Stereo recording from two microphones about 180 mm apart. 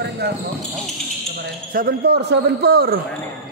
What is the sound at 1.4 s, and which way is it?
Speech, 55° right (ahead or behind).